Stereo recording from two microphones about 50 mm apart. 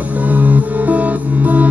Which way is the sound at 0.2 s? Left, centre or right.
Right.